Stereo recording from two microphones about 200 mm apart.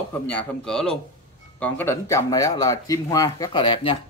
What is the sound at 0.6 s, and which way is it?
Speech, 5° left (ahead or behind).